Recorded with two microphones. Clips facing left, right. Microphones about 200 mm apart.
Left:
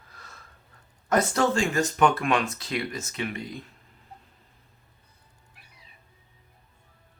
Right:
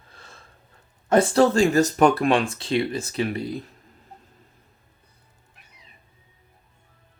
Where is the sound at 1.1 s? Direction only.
30° right (ahead or behind).